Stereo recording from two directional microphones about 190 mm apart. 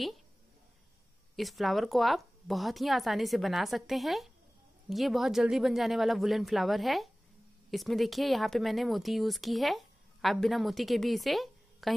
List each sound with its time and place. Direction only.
1.3 s speech: centre (ahead or behind)